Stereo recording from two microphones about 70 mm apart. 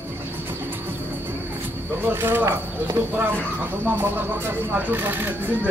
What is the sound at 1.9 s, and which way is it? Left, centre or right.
Speech, right.